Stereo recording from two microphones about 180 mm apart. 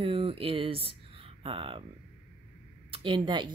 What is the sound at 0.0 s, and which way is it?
Speech, 30° right (ahead or behind).